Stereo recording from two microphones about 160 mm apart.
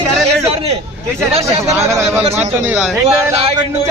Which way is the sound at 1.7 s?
20° right (ahead or behind).